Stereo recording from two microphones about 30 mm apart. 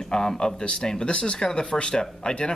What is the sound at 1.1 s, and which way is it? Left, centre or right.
Speech, left.